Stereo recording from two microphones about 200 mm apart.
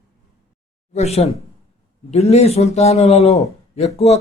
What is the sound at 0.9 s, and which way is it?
A man's voice, 35° left (ahead or behind).